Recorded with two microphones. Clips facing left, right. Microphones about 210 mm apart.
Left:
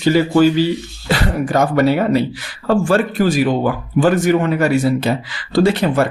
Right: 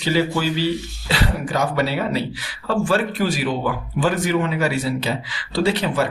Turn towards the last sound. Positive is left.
turn(degrees=50)  # may be behind; listen again after turning